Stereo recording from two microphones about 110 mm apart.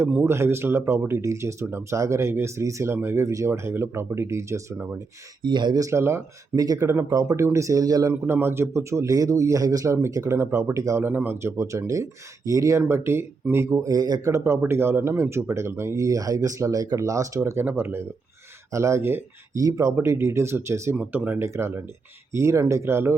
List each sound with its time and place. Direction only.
0.2 s speech: 25° right (ahead or behind)
5.4 s speech: 45° right (ahead or behind)
8.1 s speech: 20° right (ahead or behind)
20.9 s speech: 10° right (ahead or behind)
21.4 s speech: 25° right (ahead or behind)